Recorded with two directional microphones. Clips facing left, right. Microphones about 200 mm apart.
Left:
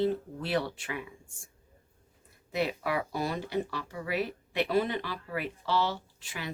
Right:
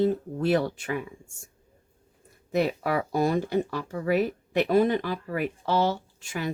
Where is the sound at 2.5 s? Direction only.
45° right (ahead or behind).